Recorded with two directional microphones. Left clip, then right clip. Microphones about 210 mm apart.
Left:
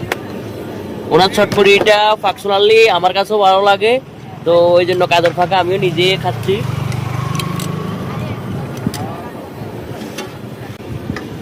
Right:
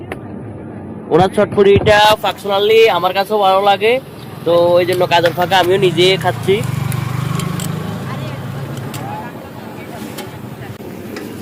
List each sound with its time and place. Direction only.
1.1 s speech: 10° left (ahead or behind)
2.2 s speech: 20° left (ahead or behind)
5.4 s speech: 5° left (ahead or behind)